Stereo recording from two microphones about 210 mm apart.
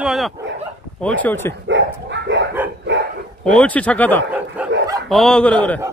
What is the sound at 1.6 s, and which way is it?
Dog, 60° right (ahead or behind).